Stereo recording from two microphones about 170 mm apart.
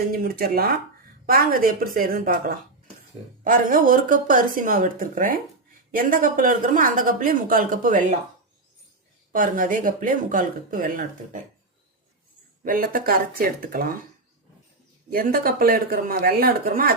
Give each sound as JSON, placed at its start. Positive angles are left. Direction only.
{"t": 0.1, "sound": "speech", "side_deg": -60}
{"t": 9.3, "sound": "speech", "side_deg": -55}
{"t": 12.6, "sound": "speech", "side_deg": -55}
{"t": 15.1, "sound": "speech", "side_deg": -60}